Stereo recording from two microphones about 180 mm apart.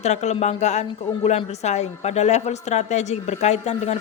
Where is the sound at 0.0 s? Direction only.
40° left (ahead or behind).